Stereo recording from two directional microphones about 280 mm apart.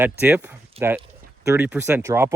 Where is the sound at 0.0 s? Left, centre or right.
Centre.